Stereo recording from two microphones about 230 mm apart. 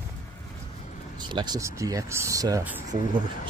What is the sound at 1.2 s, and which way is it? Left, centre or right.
Speech, centre.